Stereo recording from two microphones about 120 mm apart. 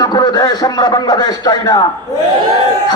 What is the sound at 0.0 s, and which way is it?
Speech, 35° left (ahead or behind).